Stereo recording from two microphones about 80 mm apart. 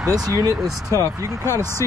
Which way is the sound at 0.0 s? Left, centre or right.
Right.